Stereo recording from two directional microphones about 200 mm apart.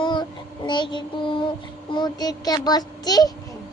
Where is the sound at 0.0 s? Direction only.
20° left (ahead or behind).